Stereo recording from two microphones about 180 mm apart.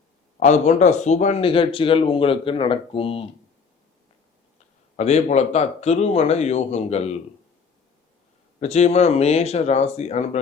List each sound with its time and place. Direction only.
0.3 s speech: 40° left (ahead or behind)
4.9 s speech: 35° left (ahead or behind)
8.6 s speech: 35° left (ahead or behind)